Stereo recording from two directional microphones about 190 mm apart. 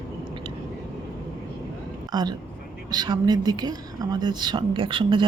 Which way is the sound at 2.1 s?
20° right (ahead or behind).